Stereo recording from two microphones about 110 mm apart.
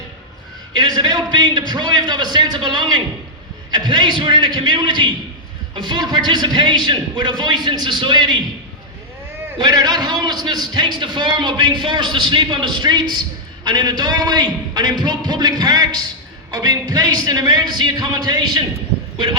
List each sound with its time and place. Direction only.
0.8 s a man's voice: 40° right (ahead or behind)
9.6 s a man's voice: 35° right (ahead or behind)